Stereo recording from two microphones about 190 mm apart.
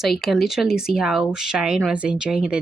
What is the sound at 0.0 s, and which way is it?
A woman's voice, centre (ahead or behind).